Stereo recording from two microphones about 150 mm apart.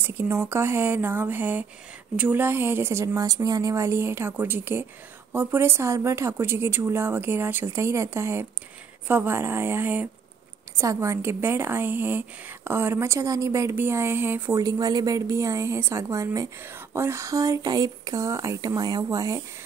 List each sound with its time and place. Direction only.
0.0 s a woman's voice: 15° right (ahead or behind)